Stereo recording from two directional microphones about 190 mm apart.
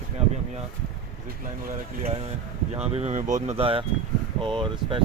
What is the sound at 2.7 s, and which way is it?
Speech, 35° right (ahead or behind).